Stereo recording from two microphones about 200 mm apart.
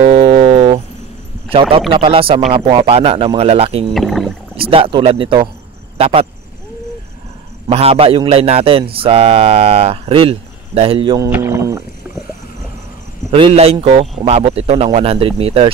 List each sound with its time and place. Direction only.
0.0 s music: 30° right (ahead or behind)
1.5 s a man's voice: 25° right (ahead or behind)
3.9 s speech: centre (ahead or behind)
4.6 s a man's voice: 25° right (ahead or behind)
7.6 s a man's voice: 30° right (ahead or behind)
11.2 s speech: 10° right (ahead or behind)
13.3 s a man's voice: 30° right (ahead or behind)